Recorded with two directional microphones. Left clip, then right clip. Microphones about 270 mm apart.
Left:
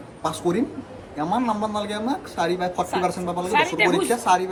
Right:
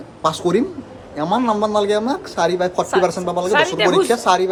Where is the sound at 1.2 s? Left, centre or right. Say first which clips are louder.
Right 6 dB; right.